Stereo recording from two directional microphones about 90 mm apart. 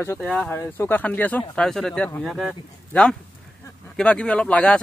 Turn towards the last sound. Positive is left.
turn(degrees=15)  # may be behind; listen again after turning